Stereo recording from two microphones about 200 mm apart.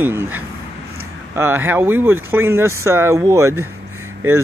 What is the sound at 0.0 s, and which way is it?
Speech, 10° right (ahead or behind).